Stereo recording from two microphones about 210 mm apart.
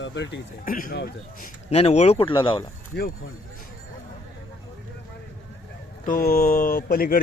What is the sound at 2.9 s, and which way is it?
Speech, 50° left (ahead or behind).